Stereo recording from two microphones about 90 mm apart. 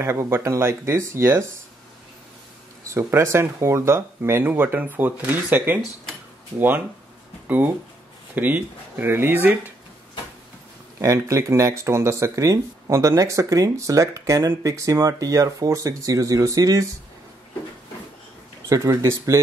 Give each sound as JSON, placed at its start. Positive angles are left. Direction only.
{"t": 0.0, "sound": "speech", "side_deg": -30}
{"t": 2.9, "sound": "speech", "side_deg": -30}
{"t": 7.4, "sound": "speech", "side_deg": -20}
{"t": 11.0, "sound": "speech", "side_deg": -35}
{"t": 18.7, "sound": "speech", "side_deg": -35}